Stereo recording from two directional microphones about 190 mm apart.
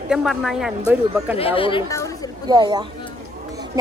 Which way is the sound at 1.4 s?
30° left (ahead or behind).